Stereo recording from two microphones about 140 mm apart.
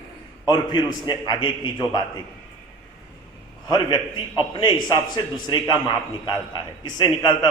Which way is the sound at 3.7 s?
35° left (ahead or behind).